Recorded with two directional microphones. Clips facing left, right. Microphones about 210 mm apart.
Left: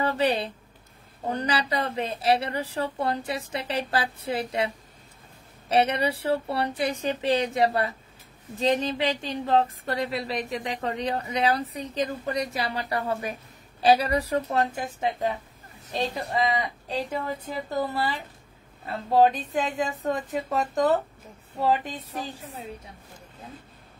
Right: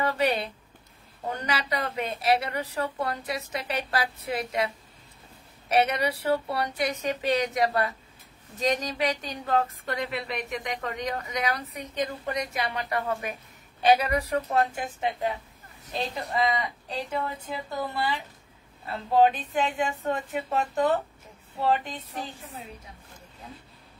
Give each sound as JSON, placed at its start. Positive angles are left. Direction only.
{"t": 0.0, "sound": "a woman's voice", "side_deg": 30}
{"t": 19.5, "sound": "speech", "side_deg": 35}